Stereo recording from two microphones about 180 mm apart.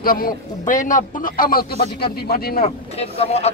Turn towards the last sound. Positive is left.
turn(degrees=35)  # may be behind; listen again after turning